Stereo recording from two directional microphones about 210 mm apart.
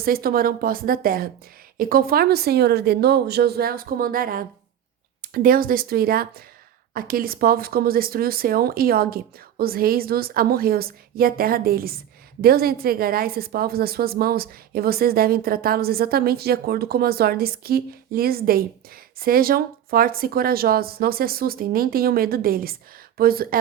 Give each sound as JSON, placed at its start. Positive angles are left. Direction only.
{"t": 0.0, "sound": "a woman's voice", "side_deg": -45}